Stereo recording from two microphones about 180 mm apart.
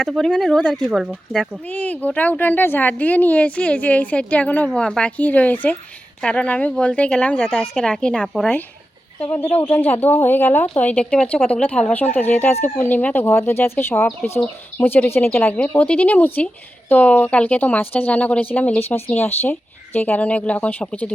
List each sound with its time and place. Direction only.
0.0 s a woman's voice: 5° left (ahead or behind)
9.8 s speech: 10° left (ahead or behind)